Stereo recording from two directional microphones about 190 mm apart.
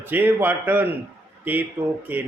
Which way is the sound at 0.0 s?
10° right (ahead or behind).